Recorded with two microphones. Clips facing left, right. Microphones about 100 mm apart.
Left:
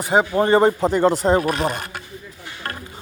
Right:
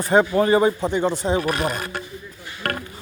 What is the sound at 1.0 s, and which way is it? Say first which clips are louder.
Speech: left 7 dB; 90° left.